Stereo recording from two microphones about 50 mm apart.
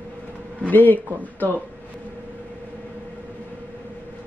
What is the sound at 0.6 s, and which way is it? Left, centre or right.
Speech, left.